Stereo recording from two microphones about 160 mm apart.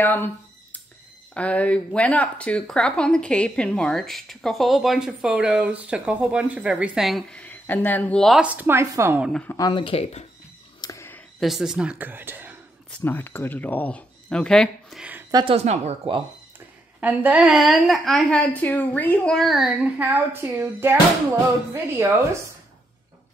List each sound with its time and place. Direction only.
0.0 s speech: 10° left (ahead or behind)
1.3 s speech: 10° left (ahead or behind); by 9.2 s 15° right (ahead or behind)
9.2 s speech: 5° left (ahead or behind)
9.5 s speech: 25° left (ahead or behind)
10.8 s a sound: 20° left (ahead or behind)
11.3 s speech: centre (ahead or behind)
13.0 s speech: 15° left (ahead or behind)
15.3 s speech: 35° right (ahead or behind)
16.5 s speech: 10° right (ahead or behind)